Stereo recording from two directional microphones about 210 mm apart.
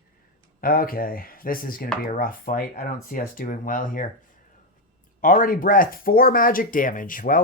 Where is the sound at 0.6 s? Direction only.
45° left (ahead or behind).